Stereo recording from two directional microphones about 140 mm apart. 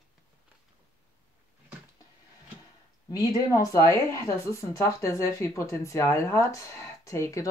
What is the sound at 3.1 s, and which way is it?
Speech, 25° left (ahead or behind).